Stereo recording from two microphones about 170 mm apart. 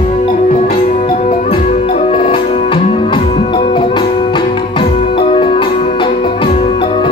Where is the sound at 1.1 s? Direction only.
45° left (ahead or behind).